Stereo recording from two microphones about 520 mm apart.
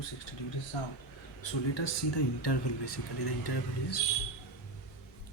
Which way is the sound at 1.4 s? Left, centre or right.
Left.